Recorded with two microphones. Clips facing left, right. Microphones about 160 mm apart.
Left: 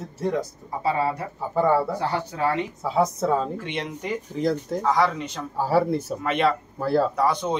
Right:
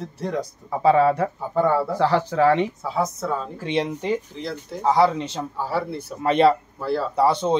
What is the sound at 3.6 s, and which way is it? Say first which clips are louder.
Speech: right 6 dB; 30° right (ahead or behind).